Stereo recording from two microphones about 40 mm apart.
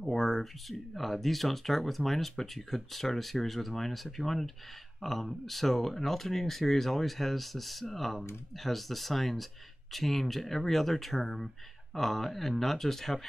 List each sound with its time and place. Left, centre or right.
0.0 s speech: centre